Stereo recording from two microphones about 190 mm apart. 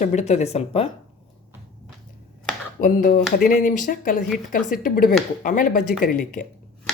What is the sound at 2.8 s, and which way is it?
Speech, 45° left (ahead or behind).